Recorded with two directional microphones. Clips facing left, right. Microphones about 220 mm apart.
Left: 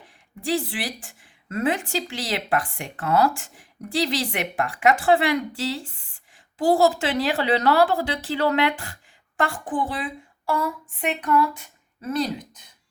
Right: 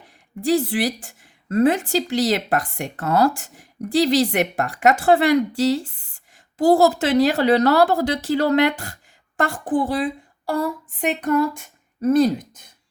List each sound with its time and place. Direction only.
0.4 s a woman's voice: 40° right (ahead or behind)